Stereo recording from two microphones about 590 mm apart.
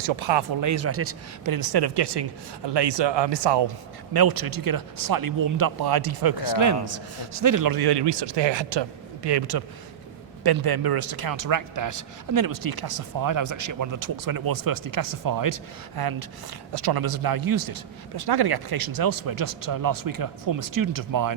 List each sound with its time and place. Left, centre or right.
0.0 s speech: right
0.6 s a man's voice: right
1.5 s a man's voice: right